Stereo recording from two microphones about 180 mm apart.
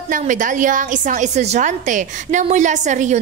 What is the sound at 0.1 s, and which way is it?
A woman's voice, 45° right (ahead or behind).